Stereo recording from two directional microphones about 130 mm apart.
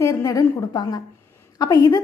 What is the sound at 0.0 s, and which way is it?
A woman's voice, 25° left (ahead or behind).